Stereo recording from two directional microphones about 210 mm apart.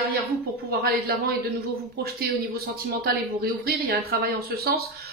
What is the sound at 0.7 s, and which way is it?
A woman's voice, 45° right (ahead or behind).